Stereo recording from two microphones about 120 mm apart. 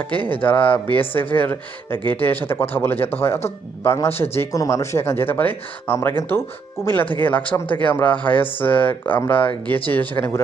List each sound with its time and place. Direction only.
0.4 s speech: 15° left (ahead or behind)
8.4 s speech: 50° left (ahead or behind)
8.6 s speech: 15° left (ahead or behind)